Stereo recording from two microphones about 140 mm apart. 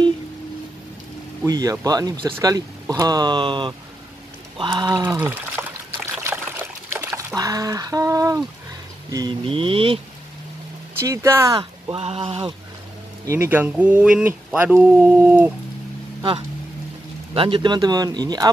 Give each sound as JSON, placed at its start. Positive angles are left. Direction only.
{"t": 1.4, "sound": "speech", "side_deg": -25}
{"t": 4.6, "sound": "mantra", "side_deg": -30}
{"t": 5.0, "sound": "trickle", "side_deg": -15}
{"t": 7.3, "sound": "speech", "side_deg": -25}
{"t": 9.1, "sound": "mantra", "side_deg": -30}
{"t": 11.0, "sound": "speech", "side_deg": -20}
{"t": 11.9, "sound": "mantra", "side_deg": -45}
{"t": 13.2, "sound": "speech", "side_deg": -20}
{"t": 17.3, "sound": "speech", "side_deg": -40}